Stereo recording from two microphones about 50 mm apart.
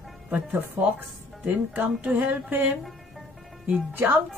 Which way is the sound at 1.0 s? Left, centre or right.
Right.